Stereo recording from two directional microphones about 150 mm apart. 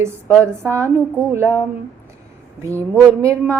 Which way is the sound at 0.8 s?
10° left (ahead or behind).